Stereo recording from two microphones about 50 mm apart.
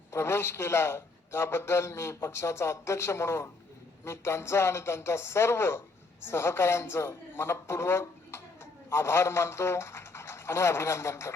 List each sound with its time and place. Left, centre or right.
0.1 s a man's voice: left